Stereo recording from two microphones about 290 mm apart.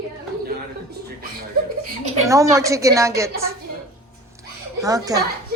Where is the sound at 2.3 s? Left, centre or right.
Centre.